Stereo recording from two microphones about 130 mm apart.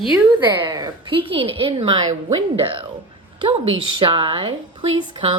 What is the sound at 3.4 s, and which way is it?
A woman's voice, 45° right (ahead or behind).